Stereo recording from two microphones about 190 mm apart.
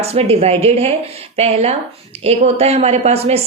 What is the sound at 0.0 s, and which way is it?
Speech, 30° right (ahead or behind).